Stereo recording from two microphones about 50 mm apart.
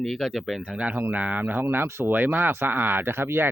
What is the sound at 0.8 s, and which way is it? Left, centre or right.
Speech, right.